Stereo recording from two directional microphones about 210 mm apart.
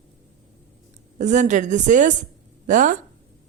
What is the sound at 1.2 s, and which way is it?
A woman's voice, 35° right (ahead or behind).